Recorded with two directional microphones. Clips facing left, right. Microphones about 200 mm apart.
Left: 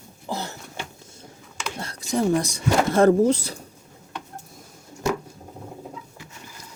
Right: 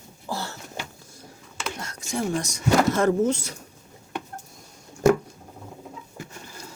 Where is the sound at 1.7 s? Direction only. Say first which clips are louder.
Left 6 dB; 35° left (ahead or behind).